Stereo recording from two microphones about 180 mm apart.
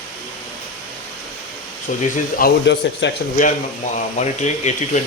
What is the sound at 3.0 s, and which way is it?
Speech, 80° left.